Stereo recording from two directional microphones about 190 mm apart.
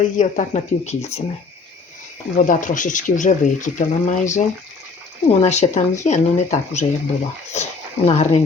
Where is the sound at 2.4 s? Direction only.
45° left (ahead or behind).